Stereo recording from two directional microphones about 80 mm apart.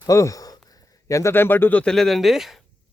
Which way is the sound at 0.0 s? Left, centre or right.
Left.